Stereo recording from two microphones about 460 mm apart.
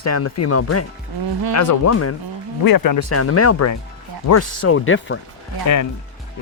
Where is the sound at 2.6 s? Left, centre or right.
Left.